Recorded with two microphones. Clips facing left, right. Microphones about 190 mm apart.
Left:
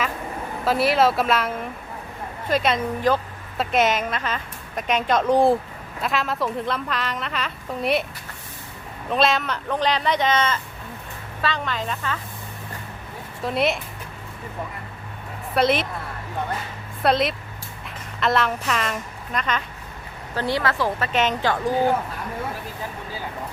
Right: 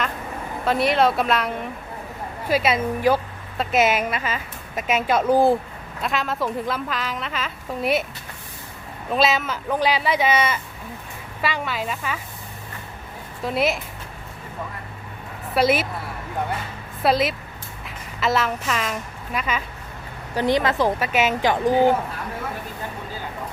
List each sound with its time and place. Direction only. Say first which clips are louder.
0.6 s a woman's voice: even; centre (ahead or behind)
9.0 s speech: even; 5° right (ahead or behind)
13.4 s a woman's voice: even; centre (ahead or behind)
15.5 s a woman's voice: right 1 dB; 5° right (ahead or behind)
17.0 s a woman's voice: even; centre (ahead or behind)
20.3 s speech: right 4 dB; 15° right (ahead or behind)